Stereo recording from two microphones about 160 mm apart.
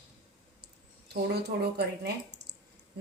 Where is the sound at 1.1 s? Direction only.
90° right.